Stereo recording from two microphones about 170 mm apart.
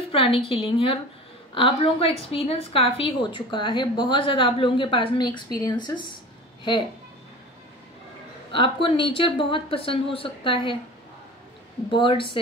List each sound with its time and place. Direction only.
0.1 s a woman's voice: 35° left (ahead or behind)
8.5 s speech: 30° left (ahead or behind)
11.9 s speech: 30° left (ahead or behind)